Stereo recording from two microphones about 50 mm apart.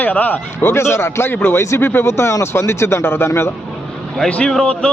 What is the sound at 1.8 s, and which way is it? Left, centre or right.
Speech, left.